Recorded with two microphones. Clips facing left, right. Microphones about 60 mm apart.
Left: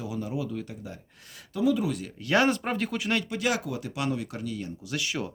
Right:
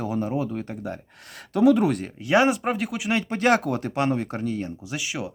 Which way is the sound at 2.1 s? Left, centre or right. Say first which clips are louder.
Right 3 dB; centre.